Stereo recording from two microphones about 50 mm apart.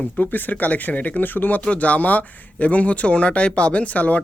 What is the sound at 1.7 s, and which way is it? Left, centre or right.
Speech, left.